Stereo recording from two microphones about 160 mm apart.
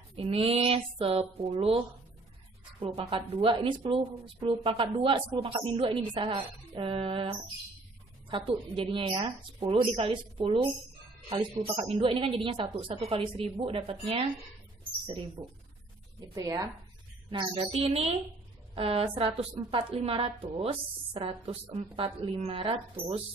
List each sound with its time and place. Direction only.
0.1 s speech: 35° right (ahead or behind)
2.8 s speech: 35° right (ahead or behind)
16.3 s speech: 20° right (ahead or behind)
17.3 s speech: 35° right (ahead or behind)